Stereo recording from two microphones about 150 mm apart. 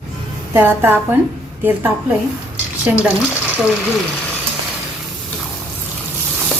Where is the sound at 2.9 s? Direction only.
10° right (ahead or behind).